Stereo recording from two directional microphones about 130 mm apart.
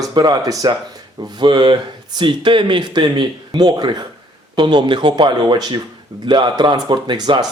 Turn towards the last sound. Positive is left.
turn(degrees=-30)  # may be behind; listen again after turning